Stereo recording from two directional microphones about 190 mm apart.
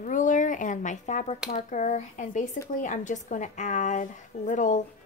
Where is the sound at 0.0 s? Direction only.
45° left (ahead or behind).